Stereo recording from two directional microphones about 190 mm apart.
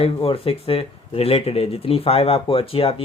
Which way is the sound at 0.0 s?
30° left (ahead or behind).